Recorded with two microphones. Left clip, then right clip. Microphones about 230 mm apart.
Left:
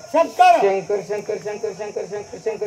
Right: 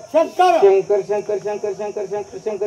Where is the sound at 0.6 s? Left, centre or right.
Right.